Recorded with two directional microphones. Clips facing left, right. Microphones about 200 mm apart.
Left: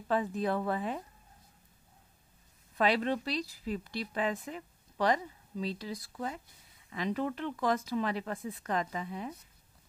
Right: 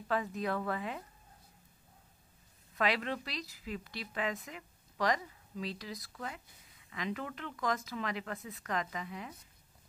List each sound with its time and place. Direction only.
0.1 s speech: 30° left (ahead or behind)
2.8 s speech: 30° left (ahead or behind)